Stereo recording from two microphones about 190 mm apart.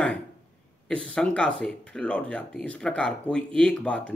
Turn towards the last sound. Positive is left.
turn(degrees=5)  # may be behind; listen again after turning